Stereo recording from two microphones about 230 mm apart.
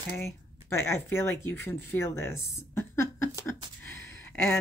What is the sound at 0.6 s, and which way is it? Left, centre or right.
Speech, centre.